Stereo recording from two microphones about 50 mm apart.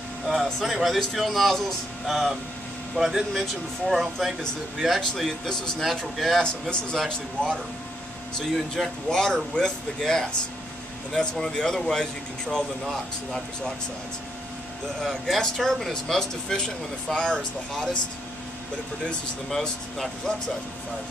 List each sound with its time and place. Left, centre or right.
0.6 s speech: centre
6.4 s speech: centre
8.4 s speech: centre
11.3 s speech: centre
15.0 s speech: centre
19.0 s speech: centre